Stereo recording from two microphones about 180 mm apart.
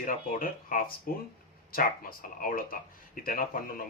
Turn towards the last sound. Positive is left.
turn(degrees=50)  # may be behind; listen again after turning